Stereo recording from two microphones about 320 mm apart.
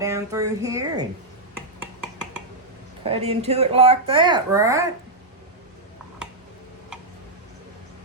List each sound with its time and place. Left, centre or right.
0.0 s speech: centre
3.0 s speech: centre
6.2 s a sound: centre